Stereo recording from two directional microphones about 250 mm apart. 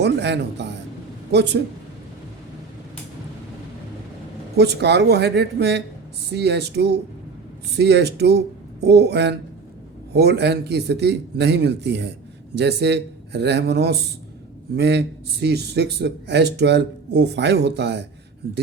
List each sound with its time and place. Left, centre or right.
0.0 s speech: right
4.5 s a man's voice: right